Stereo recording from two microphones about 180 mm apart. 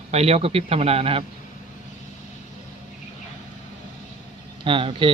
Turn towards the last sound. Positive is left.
turn(degrees=-30)  # may be behind; listen again after turning